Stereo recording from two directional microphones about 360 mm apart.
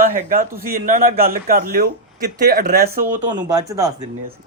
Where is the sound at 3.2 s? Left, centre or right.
Centre.